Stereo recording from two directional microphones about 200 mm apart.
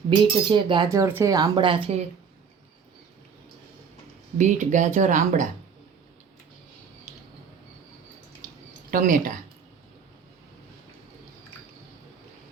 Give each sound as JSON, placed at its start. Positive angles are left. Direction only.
{"t": 0.1, "sound": "speech", "side_deg": -25}
{"t": 4.4, "sound": "speech", "side_deg": -35}
{"t": 8.9, "sound": "speech", "side_deg": -40}